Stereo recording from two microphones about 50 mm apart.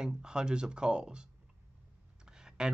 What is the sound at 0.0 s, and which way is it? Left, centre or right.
Speech, centre.